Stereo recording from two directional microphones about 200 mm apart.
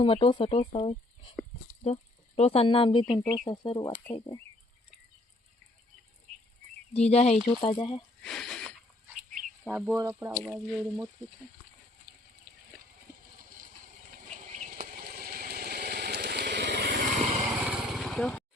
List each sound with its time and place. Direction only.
0.0 s speech: 25° left (ahead or behind)
6.3 s a sound: 35° right (ahead or behind)
6.9 s speech: 30° left (ahead or behind)
8.2 s a sound: centre (ahead or behind)
9.6 s speech: 10° right (ahead or behind)
14.5 s vehicle: 40° right (ahead or behind)
17.5 s vehicle: 5° right (ahead or behind)